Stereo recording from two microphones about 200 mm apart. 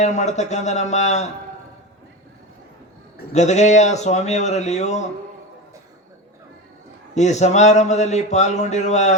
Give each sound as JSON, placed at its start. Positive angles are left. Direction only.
{"t": 0.0, "sound": "speech", "side_deg": 35}
{"t": 3.3, "sound": "speech", "side_deg": 35}
{"t": 7.1, "sound": "speech", "side_deg": 35}